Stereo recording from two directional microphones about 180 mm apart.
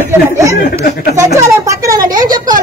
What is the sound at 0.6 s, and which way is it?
Speech, 60° left (ahead or behind).